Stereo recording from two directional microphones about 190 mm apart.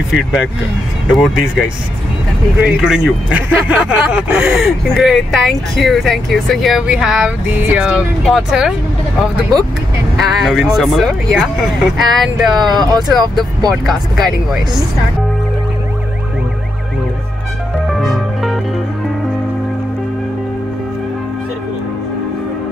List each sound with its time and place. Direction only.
1.1 s speech: centre (ahead or behind)
2.6 s speech: 5° right (ahead or behind)
10.1 s speech: centre (ahead or behind)
12.6 s speech: 20° right (ahead or behind)
13.7 s speech: centre (ahead or behind)
18.0 s music: centre (ahead or behind)